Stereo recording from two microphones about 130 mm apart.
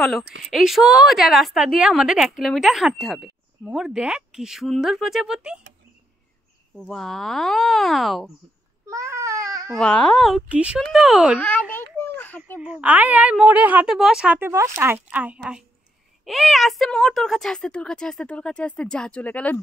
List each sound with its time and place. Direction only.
0.0 s a woman's voice: centre (ahead or behind)
6.8 s a woman's voice: 5° left (ahead or behind)
8.8 s baby cry: 25° right (ahead or behind)
9.8 s a woman's voice: 5° left (ahead or behind)
11.3 s a child's voice: 10° left (ahead or behind)
11.7 s a sound: 15° left (ahead or behind)
12.5 s a woman's voice: 10° right (ahead or behind); by 19.6 s 10° left (ahead or behind)